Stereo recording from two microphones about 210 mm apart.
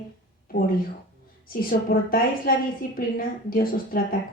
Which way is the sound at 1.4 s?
45° left (ahead or behind).